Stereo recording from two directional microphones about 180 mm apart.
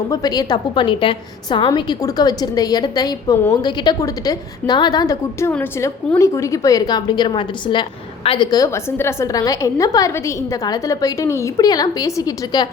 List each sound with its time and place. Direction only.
0.1 s a woman's voice: 20° left (ahead or behind)